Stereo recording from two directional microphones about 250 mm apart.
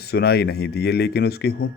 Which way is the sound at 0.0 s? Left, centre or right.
Left.